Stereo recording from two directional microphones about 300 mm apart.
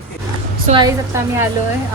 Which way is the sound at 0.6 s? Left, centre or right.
Centre.